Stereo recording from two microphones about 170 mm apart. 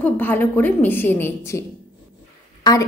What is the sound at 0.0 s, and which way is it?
A woman's voice, 10° left (ahead or behind).